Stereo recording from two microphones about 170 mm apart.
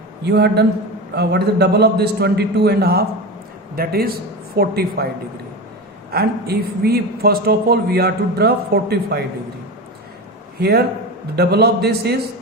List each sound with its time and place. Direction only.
0.3 s a man's voice: 75° right (ahead or behind)
6.1 s a man's voice: 65° right (ahead or behind)
10.6 s a man's voice: 70° right (ahead or behind)